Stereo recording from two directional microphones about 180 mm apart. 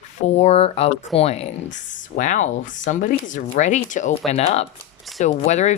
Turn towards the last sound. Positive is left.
turn(degrees=40)  # may be behind; listen again after turning